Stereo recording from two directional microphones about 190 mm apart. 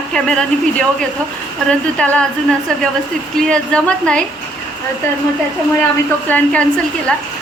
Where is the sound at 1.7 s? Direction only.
5° left (ahead or behind).